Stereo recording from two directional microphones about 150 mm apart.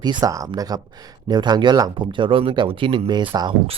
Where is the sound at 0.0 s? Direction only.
25° right (ahead or behind).